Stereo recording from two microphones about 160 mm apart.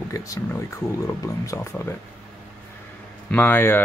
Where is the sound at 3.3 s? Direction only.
10° left (ahead or behind).